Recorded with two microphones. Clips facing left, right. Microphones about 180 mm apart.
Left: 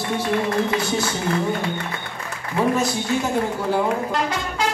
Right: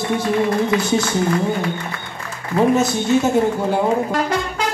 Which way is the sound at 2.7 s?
25° right (ahead or behind).